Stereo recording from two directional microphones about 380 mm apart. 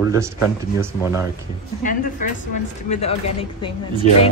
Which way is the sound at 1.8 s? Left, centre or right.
Left.